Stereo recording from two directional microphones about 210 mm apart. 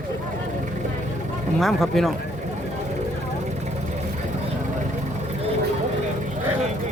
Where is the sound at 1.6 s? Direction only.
Centre (ahead or behind).